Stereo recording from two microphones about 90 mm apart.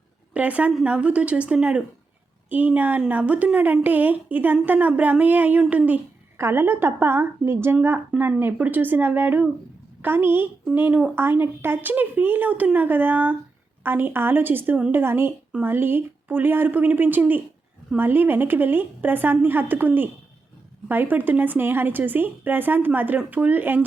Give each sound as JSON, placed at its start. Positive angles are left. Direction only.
{"t": 0.3, "sound": "a woman's voice", "side_deg": -15}
{"t": 6.3, "sound": "a woman's voice", "side_deg": -25}